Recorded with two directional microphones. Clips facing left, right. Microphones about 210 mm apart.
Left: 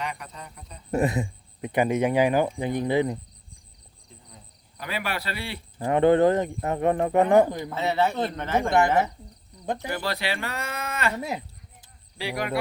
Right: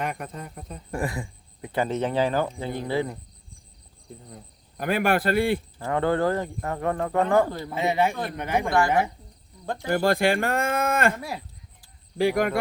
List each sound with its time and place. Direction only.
0.0 s speech: 50° right (ahead or behind)
0.9 s speech: 20° left (ahead or behind)
4.1 s speech: 50° right (ahead or behind)
5.8 s a man's voice: 20° left (ahead or behind)
7.7 s speech: 15° right (ahead or behind)
9.9 s speech: 50° right (ahead or behind)
11.2 s a sound: 20° left (ahead or behind)
12.1 s speech: 50° right (ahead or behind)